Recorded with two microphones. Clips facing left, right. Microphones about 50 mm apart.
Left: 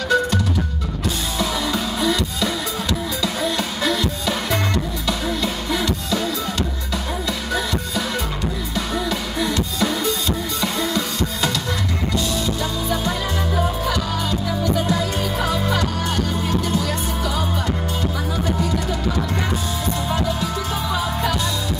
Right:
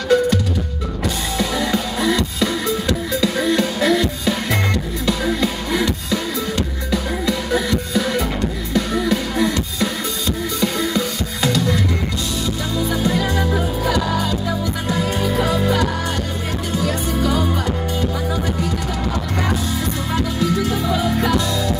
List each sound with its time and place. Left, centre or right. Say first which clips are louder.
1.0 s music: right 1 dB; right